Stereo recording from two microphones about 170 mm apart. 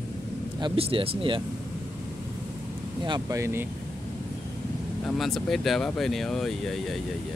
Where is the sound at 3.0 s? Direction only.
25° right (ahead or behind).